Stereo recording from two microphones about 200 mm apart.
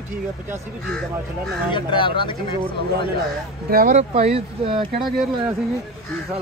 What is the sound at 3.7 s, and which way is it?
Speech, 45° right (ahead or behind).